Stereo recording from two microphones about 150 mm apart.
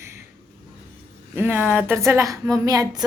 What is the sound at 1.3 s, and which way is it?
A woman's voice, 15° right (ahead or behind).